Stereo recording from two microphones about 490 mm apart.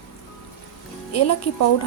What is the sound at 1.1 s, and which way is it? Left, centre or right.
Speech, left.